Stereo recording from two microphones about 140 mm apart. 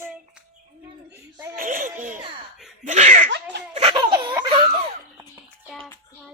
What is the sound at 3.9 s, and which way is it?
Baby laughter, 35° right (ahead or behind).